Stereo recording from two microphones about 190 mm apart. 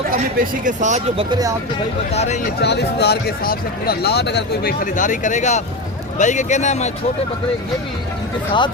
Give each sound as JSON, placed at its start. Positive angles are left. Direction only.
{"t": 0.1, "sound": "speech", "side_deg": -45}
{"t": 2.1, "sound": "speech", "side_deg": 35}
{"t": 2.4, "sound": "speech", "side_deg": 60}